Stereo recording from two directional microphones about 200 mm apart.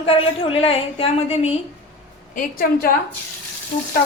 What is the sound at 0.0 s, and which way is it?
A woman's voice, 30° left (ahead or behind).